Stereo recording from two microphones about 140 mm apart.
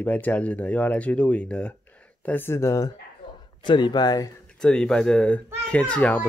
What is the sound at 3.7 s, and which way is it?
Speech, 35° left (ahead or behind).